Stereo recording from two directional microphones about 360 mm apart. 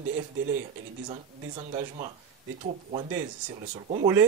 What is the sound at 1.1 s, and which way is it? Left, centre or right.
Speech, centre.